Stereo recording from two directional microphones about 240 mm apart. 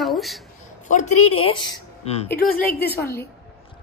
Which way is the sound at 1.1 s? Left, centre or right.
Left.